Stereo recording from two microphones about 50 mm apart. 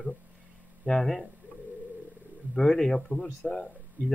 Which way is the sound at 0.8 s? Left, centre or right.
Centre.